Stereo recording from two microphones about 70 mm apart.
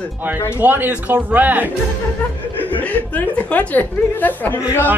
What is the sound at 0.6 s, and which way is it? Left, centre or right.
Speech, right.